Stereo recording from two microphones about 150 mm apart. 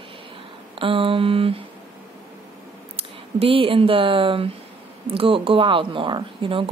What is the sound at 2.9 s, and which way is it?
Speech, 40° right (ahead or behind).